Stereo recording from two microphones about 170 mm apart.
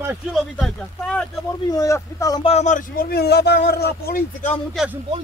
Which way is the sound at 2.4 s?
40° left (ahead or behind).